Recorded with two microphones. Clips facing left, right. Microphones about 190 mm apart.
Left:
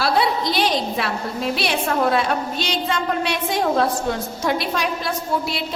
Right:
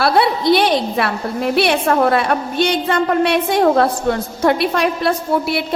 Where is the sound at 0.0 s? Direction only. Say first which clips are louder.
Right 5 dB; 60° right (ahead or behind).